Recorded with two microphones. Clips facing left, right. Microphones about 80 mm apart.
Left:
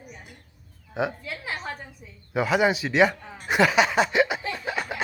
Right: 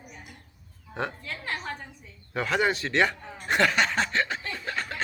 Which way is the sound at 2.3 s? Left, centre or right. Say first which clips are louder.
Left 4 dB; centre.